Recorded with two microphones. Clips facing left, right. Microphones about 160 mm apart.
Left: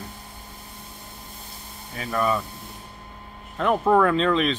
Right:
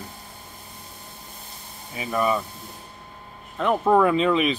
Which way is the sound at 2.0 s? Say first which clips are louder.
Right 1 dB; 10° right (ahead or behind).